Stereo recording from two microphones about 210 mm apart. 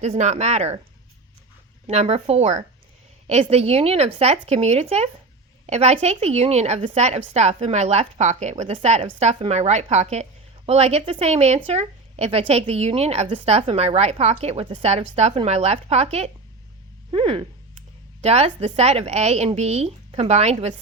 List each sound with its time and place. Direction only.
0.0 s a woman's voice: 35° right (ahead or behind)
1.9 s a woman's voice: 30° right (ahead or behind)